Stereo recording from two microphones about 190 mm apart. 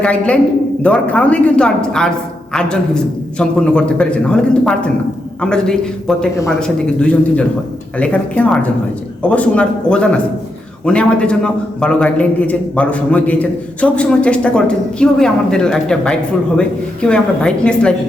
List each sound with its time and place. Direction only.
0.0 s a man's voice: 5° left (ahead or behind)